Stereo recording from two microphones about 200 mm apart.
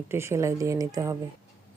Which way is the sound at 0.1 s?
15° right (ahead or behind).